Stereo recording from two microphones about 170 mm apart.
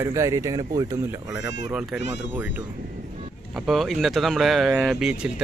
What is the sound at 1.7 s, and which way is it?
Speech, 5° right (ahead or behind).